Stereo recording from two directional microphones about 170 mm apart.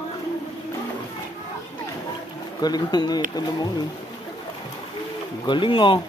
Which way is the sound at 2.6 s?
25° left (ahead or behind).